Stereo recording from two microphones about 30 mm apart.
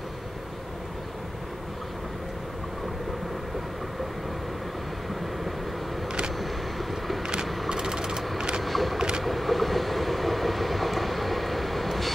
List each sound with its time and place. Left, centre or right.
7.4 s a sound: centre
7.7 s sewing machine: right
8.6 s boat: centre
8.9 s vehicle: right
9.2 s vehicle: centre